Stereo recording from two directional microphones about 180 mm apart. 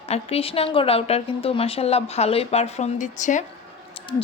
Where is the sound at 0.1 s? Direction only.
35° left (ahead or behind).